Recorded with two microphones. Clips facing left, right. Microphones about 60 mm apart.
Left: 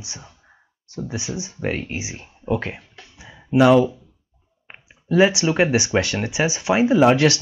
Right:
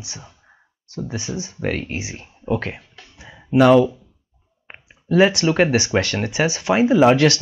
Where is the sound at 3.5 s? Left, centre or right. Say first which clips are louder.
Right 1 dB; centre.